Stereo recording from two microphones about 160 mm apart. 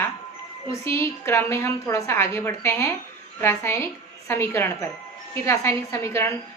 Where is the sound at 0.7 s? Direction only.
15° left (ahead or behind).